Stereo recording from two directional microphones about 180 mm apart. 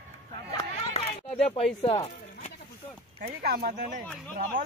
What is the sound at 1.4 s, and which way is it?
Speech, 30° left (ahead or behind).